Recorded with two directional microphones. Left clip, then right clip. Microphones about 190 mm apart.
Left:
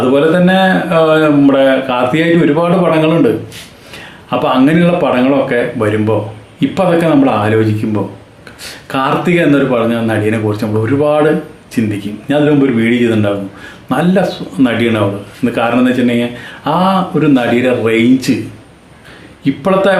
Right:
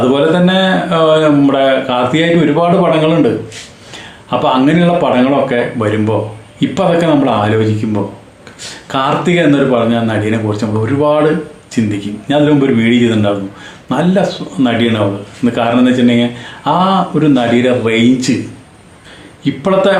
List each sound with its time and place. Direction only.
0.1 s speech: 10° left (ahead or behind)
4.3 s speech: 10° left (ahead or behind)
8.9 s speech: 10° left (ahead or behind)
19.5 s speech: 10° left (ahead or behind)